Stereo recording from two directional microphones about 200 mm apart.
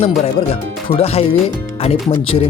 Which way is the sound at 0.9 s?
30° left (ahead or behind).